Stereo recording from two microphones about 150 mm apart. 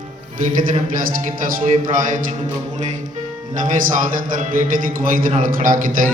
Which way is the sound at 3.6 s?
60° right (ahead or behind).